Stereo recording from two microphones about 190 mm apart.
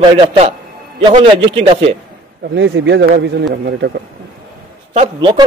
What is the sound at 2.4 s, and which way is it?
Speech, 70° right (ahead or behind).